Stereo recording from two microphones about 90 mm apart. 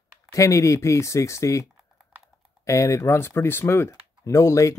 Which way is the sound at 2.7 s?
35° left (ahead or behind).